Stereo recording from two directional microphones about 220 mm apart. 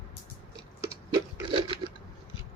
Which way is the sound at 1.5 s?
20° right (ahead or behind).